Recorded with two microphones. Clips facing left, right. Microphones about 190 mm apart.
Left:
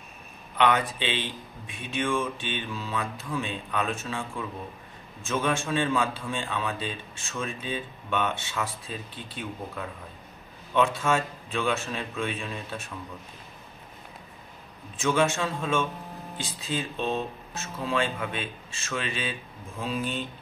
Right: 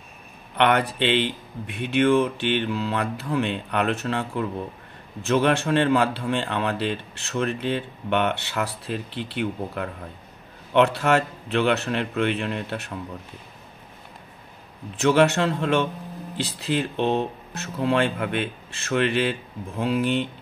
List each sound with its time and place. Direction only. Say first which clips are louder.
0.6 s speech: right 4 dB; 65° right (ahead or behind)
15.0 s speech: right 6 dB; 65° right (ahead or behind)